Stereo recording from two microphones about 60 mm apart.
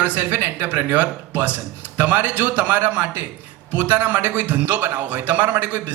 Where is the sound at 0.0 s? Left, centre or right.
Right.